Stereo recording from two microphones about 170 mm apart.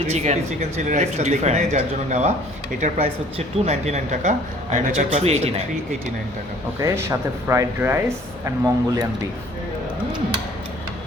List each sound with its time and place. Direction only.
0.1 s speech: 40° right (ahead or behind)
6.7 s speech: 15° right (ahead or behind)